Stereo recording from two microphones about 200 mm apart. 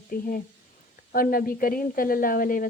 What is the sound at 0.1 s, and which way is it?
A woman's voice, 45° left (ahead or behind).